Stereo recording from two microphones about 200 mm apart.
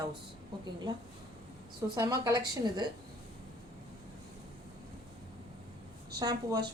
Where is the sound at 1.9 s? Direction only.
15° right (ahead or behind).